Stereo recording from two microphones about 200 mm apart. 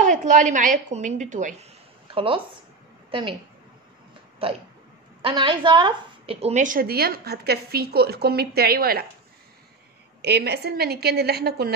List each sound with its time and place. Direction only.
0.0 s a woman's voice: 40° right (ahead or behind)
2.1 s a woman's voice: 25° right (ahead or behind)
4.4 s a woman's voice: 30° right (ahead or behind); by 9.0 s 50° right (ahead or behind)
10.2 s a woman's voice: 55° right (ahead or behind)